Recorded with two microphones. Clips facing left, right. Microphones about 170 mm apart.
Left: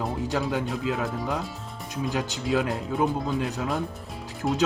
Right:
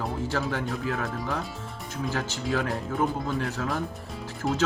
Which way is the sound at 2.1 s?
15° left (ahead or behind).